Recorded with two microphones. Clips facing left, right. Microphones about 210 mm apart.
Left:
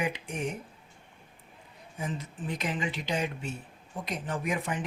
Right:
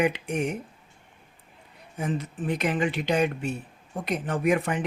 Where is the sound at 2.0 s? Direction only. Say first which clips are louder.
Right 6 dB; 65° right (ahead or behind).